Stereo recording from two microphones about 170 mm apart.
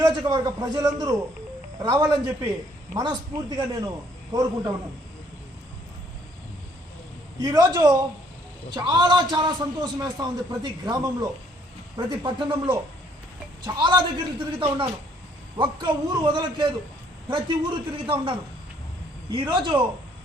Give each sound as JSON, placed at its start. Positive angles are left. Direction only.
{"t": 0.0, "sound": "a man's voice", "side_deg": -20}
{"t": 7.3, "sound": "a man's voice", "side_deg": -20}
{"t": 18.0, "sound": "a man's voice", "side_deg": -30}